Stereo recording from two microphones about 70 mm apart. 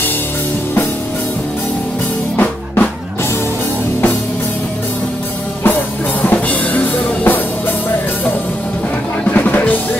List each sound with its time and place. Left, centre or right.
2.3 s music: left
6.2 s music: left
9.2 s music: left